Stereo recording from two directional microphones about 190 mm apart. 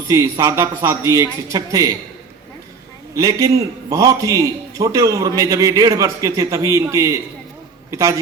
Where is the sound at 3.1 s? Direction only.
20° right (ahead or behind).